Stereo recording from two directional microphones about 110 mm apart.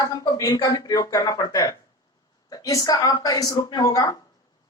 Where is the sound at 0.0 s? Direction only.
30° left (ahead or behind).